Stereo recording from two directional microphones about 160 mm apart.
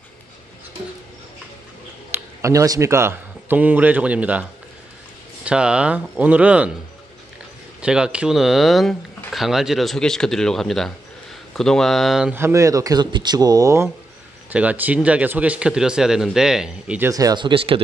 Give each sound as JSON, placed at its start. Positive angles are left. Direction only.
{"t": 2.0, "sound": "speech", "side_deg": -20}
{"t": 7.8, "sound": "speech", "side_deg": -5}
{"t": 12.4, "sound": "speech", "side_deg": -15}
{"t": 14.5, "sound": "speech", "side_deg": -10}
{"t": 17.1, "sound": "speech", "side_deg": -25}